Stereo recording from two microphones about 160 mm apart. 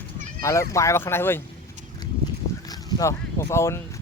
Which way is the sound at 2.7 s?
20° left (ahead or behind).